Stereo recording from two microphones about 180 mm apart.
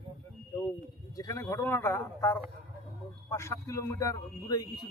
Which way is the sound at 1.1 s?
20° left (ahead or behind).